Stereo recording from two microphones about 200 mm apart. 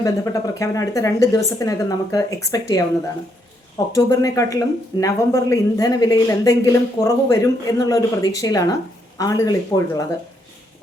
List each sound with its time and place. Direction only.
0.0 s speech: 15° left (ahead or behind)
3.9 s speech: 15° left (ahead or behind)